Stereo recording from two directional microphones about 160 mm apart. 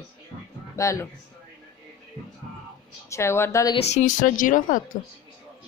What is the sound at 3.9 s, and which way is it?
Speech, 50° left (ahead or behind).